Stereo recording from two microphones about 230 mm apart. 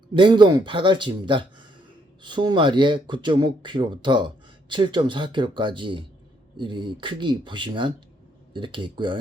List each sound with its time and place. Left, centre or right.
0.2 s speech: centre